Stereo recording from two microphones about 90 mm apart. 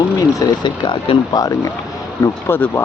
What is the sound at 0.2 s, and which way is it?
Speech, 45° left (ahead or behind).